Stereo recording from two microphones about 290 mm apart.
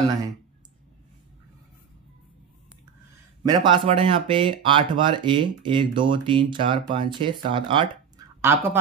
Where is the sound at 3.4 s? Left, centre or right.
Centre.